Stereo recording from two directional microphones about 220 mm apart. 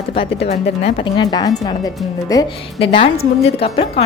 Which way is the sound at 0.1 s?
30° left (ahead or behind).